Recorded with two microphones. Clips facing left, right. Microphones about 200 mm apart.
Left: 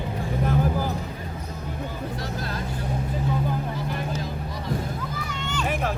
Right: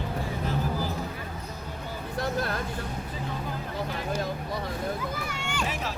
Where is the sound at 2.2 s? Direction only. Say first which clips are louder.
Right 2 dB; 55° right (ahead or behind).